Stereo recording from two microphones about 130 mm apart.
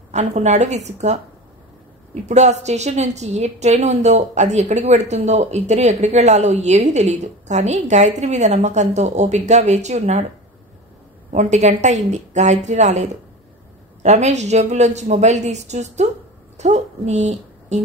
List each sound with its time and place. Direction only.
0.1 s a woman's voice: 60° right (ahead or behind)
2.2 s a woman's voice: 60° right (ahead or behind)
11.3 s a woman's voice: 65° right (ahead or behind)